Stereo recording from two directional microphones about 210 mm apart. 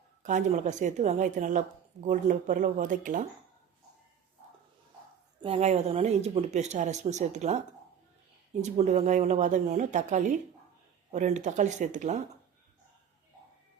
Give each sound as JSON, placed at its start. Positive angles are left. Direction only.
{"t": 0.2, "sound": "a woman's voice", "side_deg": -35}
{"t": 5.4, "sound": "a woman's voice", "side_deg": -30}
{"t": 8.6, "sound": "a woman's voice", "side_deg": -30}